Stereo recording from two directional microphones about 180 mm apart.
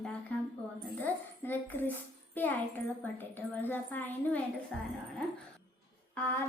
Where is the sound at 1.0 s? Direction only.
10° left (ahead or behind).